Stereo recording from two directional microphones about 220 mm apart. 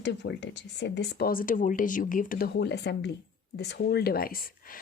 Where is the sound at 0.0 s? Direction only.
50° left (ahead or behind).